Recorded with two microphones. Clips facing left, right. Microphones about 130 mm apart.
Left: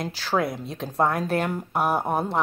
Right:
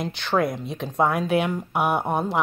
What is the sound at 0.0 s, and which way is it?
Speech, 5° left (ahead or behind).